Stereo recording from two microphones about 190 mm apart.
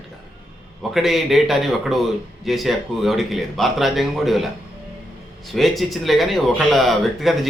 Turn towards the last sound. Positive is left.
turn(degrees=0)  # may be behind; listen again after turning